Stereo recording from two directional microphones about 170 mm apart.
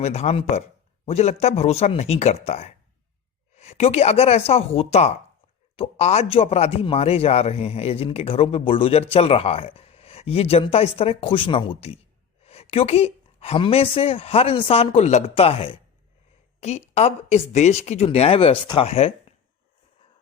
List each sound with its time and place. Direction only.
0.0 s a man's voice: 40° left (ahead or behind)